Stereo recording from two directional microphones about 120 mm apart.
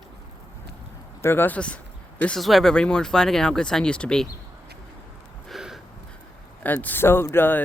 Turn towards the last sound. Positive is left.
turn(degrees=15)  # may be behind; listen again after turning